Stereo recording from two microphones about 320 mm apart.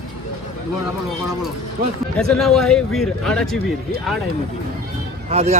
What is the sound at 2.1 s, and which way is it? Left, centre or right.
Speech, centre.